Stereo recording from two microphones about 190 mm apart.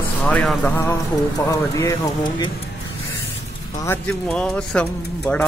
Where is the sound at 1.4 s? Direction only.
15° left (ahead or behind).